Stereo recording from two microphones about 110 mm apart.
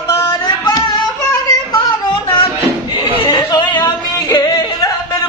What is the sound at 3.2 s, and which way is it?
Yodeling, 30° left (ahead or behind).